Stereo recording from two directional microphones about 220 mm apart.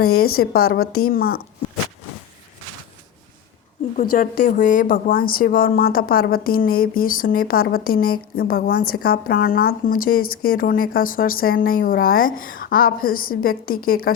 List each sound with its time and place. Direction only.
0.2 s a woman's voice: 45° left (ahead or behind)
3.9 s a woman's voice: 40° left (ahead or behind)